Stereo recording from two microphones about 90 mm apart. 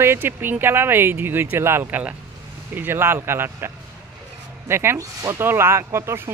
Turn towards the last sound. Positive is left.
turn(degrees=-30)  # may be behind; listen again after turning